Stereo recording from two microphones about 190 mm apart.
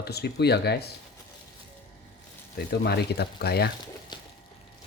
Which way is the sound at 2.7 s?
60° left (ahead or behind).